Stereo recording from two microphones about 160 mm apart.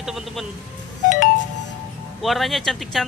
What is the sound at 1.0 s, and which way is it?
Music, 50° left (ahead or behind).